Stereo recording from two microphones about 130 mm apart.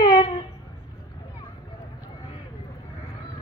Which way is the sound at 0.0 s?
40° left (ahead or behind).